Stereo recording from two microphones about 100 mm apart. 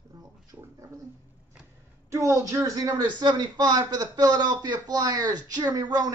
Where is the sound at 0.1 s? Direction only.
35° right (ahead or behind).